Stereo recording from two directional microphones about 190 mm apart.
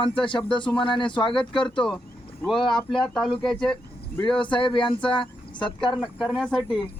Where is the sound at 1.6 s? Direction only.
5° left (ahead or behind).